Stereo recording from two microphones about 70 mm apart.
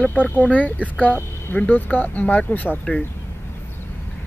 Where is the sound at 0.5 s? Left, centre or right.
Left.